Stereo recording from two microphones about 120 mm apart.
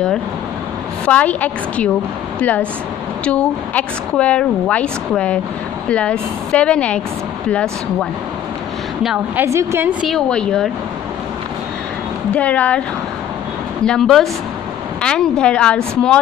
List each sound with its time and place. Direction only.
1.0 s a woman's voice: 15° left (ahead or behind)
3.3 s a woman's voice: 10° left (ahead or behind)
9.4 s a woman's voice: 25° right (ahead or behind)
10.0 s a woman's voice: 5° left (ahead or behind)
12.4 s a woman's voice: 10° left (ahead or behind)
13.8 s a woman's voice: 5° left (ahead or behind)